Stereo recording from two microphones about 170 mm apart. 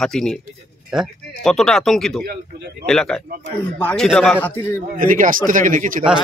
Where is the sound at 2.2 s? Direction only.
70° right (ahead or behind).